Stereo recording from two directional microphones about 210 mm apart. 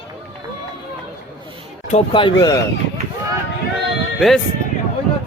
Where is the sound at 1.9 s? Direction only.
25° left (ahead or behind).